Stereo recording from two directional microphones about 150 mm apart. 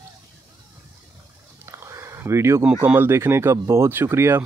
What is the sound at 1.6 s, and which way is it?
Speech, 20° right (ahead or behind).